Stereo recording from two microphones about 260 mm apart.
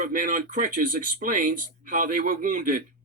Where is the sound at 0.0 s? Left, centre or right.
Right.